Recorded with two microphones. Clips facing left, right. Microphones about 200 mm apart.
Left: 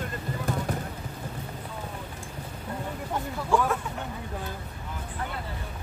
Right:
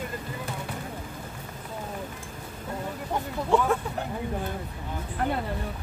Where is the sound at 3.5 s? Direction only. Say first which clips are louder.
Right 1 dB; 25° right (ahead or behind).